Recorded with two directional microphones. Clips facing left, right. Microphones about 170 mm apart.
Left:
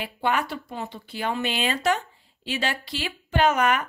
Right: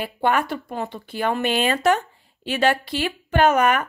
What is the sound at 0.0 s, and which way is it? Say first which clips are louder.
A woman's voice: right 4 dB; 50° right (ahead or behind).